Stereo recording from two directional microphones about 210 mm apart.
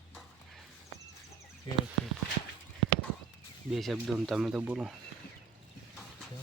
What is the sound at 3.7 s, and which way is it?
Speech, centre (ahead or behind).